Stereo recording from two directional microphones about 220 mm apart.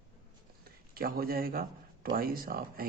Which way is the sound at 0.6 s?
45° right (ahead or behind).